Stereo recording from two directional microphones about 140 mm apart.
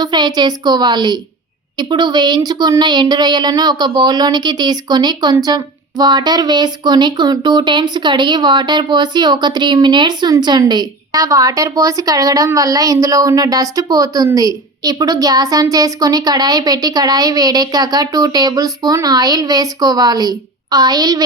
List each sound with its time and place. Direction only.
0.0 s a woman's voice: 30° right (ahead or behind)